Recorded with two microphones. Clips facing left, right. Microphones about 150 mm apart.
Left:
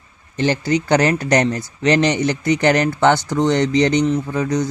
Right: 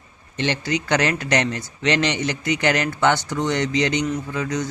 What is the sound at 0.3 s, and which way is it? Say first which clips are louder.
Speech: left 6 dB; 35° left (ahead or behind).